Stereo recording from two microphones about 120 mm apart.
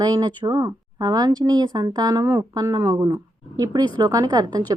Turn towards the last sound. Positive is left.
turn(degrees=-35)  # may be behind; listen again after turning